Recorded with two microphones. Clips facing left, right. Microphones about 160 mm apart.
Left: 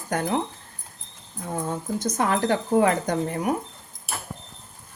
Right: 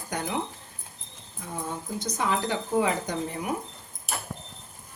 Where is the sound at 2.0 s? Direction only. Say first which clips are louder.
Left 4 dB; 50° left (ahead or behind).